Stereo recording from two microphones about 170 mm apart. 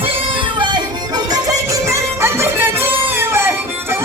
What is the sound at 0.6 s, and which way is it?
Music, 25° right (ahead or behind).